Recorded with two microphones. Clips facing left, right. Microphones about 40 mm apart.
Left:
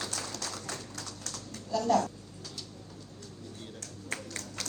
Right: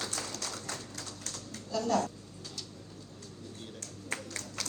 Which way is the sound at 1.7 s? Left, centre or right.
Left.